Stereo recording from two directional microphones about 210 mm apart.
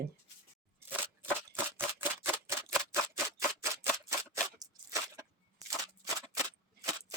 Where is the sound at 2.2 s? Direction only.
10° right (ahead or behind).